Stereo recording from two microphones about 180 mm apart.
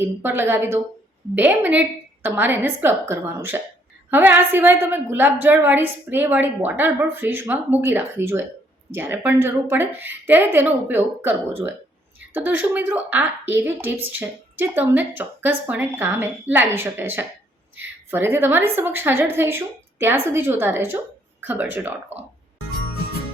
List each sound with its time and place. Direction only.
0.0 s a woman's voice: 10° right (ahead or behind)